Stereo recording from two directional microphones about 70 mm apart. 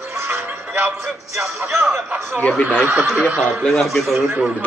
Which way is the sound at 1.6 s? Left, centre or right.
Right.